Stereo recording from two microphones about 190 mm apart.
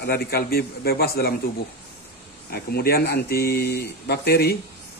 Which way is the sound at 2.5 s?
55° left (ahead or behind).